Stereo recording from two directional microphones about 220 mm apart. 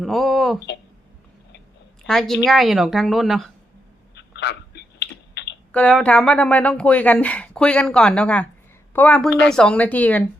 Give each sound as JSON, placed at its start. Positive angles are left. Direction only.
{"t": 0.0, "sound": "a sound", "side_deg": 0}
{"t": 2.0, "sound": "speech", "side_deg": 0}
{"t": 4.1, "sound": "typing", "side_deg": 50}
{"t": 5.7, "sound": "a woman's voice", "side_deg": 5}